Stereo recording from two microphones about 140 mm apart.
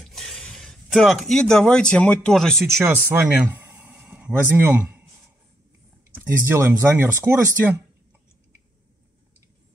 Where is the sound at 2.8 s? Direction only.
15° right (ahead or behind).